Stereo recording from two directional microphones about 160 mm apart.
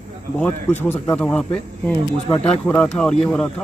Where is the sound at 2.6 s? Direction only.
10° left (ahead or behind).